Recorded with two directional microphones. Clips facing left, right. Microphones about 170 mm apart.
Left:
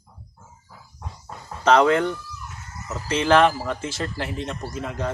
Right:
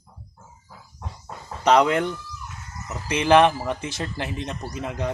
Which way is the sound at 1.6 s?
10° right (ahead or behind).